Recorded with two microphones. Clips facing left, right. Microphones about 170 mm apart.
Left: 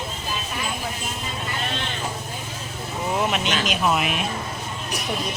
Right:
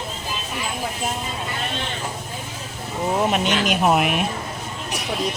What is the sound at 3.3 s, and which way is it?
Speech, 50° right (ahead or behind).